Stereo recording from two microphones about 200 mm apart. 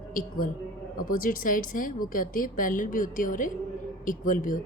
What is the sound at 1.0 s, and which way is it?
Speech, 45° left (ahead or behind).